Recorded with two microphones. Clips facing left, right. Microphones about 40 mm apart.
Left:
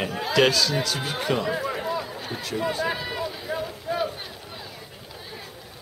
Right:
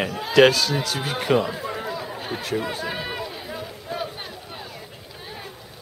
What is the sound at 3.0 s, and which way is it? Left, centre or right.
Run, centre.